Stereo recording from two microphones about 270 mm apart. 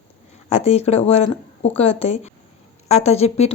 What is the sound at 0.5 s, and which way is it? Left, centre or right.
A woman's voice, left.